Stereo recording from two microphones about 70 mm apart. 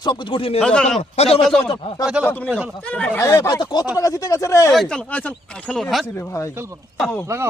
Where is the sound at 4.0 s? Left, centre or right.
Left.